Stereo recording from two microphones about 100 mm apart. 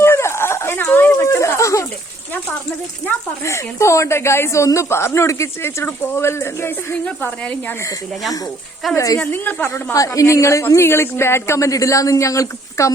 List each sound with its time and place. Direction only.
0.0 s a sound: 25° left (ahead or behind)
3.4 s speech: 30° left (ahead or behind)
9.0 s a woman's voice: 30° left (ahead or behind)
9.2 s speech: 15° left (ahead or behind)